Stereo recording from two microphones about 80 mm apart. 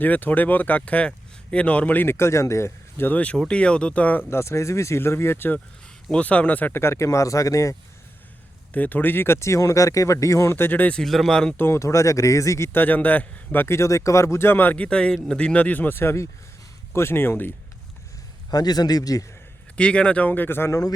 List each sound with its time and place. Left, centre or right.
0.0 s speech: left
3.1 s speech: centre
4.3 s speech: left
6.1 s speech: centre
6.8 s speech: left
8.7 s speech: left
11.0 s speech: centre
11.5 s speech: left
12.8 s speech: left
18.5 s a man's voice: left
19.7 s speech: centre; by 20.7 s left